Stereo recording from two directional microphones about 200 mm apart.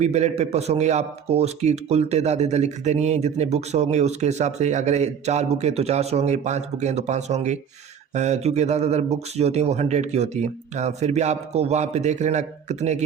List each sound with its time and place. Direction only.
0.0 s speech: 35° right (ahead or behind)